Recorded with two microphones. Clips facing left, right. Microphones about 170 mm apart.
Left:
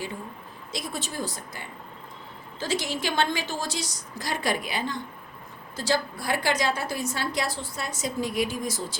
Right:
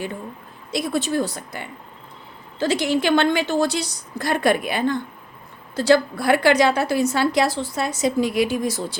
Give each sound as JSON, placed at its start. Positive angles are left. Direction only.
{"t": 0.7, "sound": "a woman's voice", "side_deg": -65}